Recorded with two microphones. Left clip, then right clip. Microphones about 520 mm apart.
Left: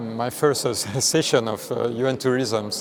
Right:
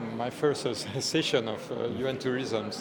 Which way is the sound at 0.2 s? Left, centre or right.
Left.